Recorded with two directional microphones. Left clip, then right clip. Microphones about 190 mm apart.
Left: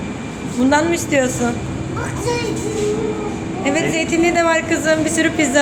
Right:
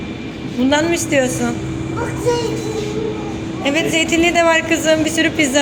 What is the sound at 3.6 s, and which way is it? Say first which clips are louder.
A man's voice: right 2 dB; 5° right (ahead or behind).